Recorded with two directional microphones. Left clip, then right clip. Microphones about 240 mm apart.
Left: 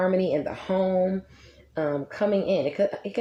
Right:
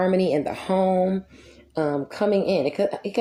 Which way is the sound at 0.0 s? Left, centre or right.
Right.